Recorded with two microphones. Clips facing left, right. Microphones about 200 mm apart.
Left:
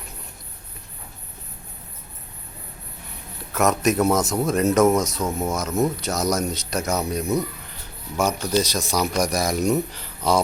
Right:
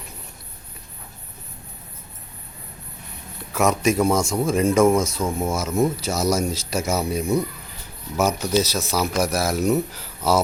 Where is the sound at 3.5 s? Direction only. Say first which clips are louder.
Even; centre (ahead or behind).